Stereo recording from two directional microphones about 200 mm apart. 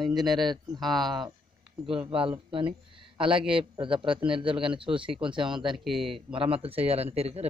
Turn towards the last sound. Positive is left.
turn(degrees=-30)  # may be behind; listen again after turning